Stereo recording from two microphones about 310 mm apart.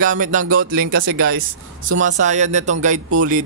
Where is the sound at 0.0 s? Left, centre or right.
Right.